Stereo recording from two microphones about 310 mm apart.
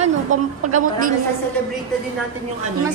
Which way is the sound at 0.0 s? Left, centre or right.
Right.